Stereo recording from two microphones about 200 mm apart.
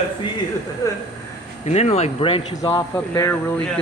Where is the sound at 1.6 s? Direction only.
35° left (ahead or behind); by 3.3 s 15° left (ahead or behind).